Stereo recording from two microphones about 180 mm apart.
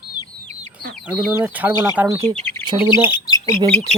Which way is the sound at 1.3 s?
10° right (ahead or behind).